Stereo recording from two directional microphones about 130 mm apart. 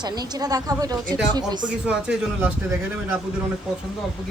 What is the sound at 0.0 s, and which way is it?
Speech, 30° right (ahead or behind).